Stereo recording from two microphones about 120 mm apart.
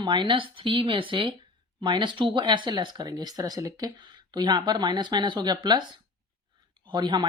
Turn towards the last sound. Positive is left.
turn(degrees=-35)  # may be behind; listen again after turning